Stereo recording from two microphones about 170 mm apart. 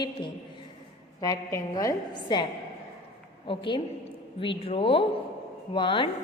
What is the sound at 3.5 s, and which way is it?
A woman's voice, 30° left (ahead or behind).